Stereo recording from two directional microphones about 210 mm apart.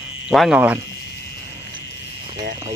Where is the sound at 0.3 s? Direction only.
Centre (ahead or behind).